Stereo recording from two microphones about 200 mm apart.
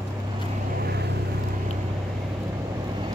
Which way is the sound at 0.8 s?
55° right (ahead or behind).